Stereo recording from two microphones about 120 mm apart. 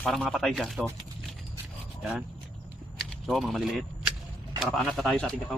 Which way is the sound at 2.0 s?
5° right (ahead or behind).